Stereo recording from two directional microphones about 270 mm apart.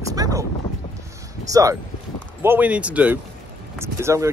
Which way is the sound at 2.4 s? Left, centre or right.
Centre.